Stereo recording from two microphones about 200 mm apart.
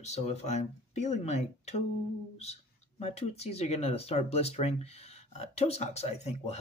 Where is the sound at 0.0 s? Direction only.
35° left (ahead or behind).